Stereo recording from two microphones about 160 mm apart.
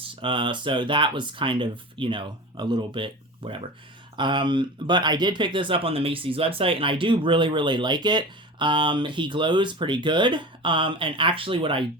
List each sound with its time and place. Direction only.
0.0 s speech: 30° right (ahead or behind)